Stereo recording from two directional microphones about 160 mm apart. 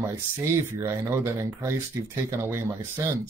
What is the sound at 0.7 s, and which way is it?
Speech, 15° right (ahead or behind).